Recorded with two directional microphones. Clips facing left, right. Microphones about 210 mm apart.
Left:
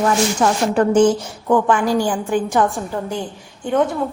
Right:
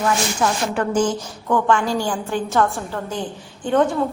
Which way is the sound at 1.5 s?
15° left (ahead or behind).